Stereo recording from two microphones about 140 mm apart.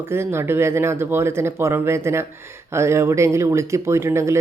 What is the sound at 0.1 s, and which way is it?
Speech, 15° right (ahead or behind).